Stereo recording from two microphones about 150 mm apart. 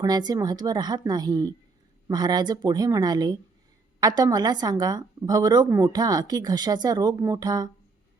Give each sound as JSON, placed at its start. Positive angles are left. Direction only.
{"t": 0.0, "sound": "speech", "side_deg": -25}